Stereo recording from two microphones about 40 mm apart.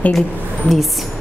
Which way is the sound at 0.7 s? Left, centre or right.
Centre.